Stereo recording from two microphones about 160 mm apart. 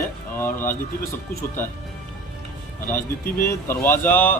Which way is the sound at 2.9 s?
15° left (ahead or behind).